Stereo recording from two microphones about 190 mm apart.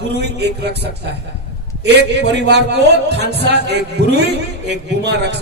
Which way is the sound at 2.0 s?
65° right (ahead or behind).